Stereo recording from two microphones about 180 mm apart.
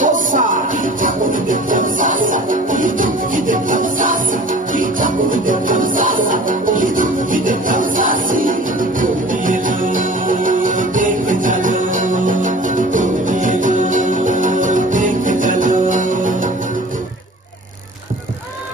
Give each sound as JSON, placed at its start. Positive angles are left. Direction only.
{"t": 0.0, "sound": "music", "side_deg": -45}